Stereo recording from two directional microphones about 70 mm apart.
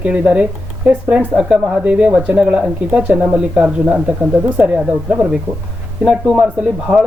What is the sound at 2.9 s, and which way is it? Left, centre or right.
Speech, right.